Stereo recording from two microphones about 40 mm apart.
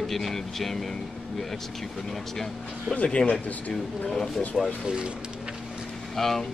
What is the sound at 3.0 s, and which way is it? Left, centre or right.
Speech, left.